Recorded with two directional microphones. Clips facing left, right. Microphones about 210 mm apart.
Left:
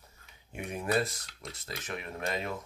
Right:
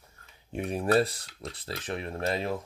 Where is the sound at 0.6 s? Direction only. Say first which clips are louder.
Right 6 dB; 35° right (ahead or behind).